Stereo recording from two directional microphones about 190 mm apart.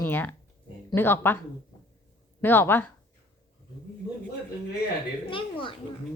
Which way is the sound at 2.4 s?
10° left (ahead or behind).